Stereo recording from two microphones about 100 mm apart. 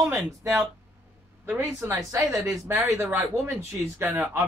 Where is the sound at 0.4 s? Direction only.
30° right (ahead or behind).